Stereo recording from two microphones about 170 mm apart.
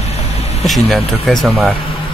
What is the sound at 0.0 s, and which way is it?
Vehicle, 40° left (ahead or behind).